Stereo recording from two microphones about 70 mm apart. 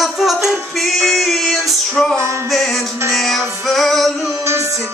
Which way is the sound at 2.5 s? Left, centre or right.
Centre.